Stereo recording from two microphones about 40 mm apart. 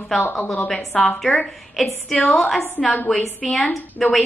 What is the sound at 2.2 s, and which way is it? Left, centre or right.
A woman's voice, centre.